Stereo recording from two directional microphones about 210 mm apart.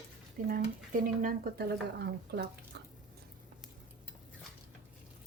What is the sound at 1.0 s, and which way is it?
Speech, 40° right (ahead or behind).